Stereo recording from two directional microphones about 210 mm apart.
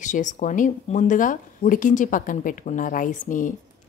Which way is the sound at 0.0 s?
35° left (ahead or behind).